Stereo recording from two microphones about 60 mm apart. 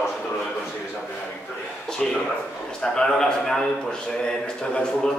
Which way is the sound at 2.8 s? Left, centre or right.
Centre.